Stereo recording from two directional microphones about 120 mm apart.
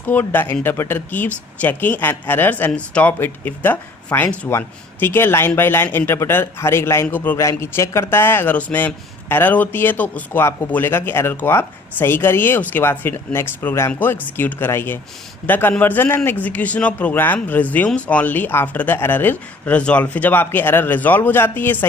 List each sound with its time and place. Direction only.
0.0 s speech: 15° left (ahead or behind)